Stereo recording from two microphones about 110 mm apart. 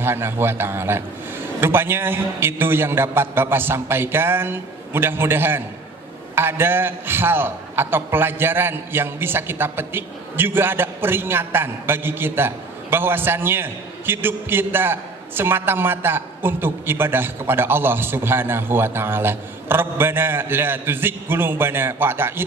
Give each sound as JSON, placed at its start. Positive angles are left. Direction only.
{"t": 0.0, "sound": "a man's voice", "side_deg": -20}